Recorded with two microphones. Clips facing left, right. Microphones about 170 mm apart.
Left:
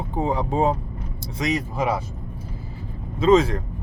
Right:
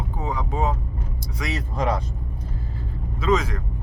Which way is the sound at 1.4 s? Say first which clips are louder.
Left 3 dB; 15° left (ahead or behind).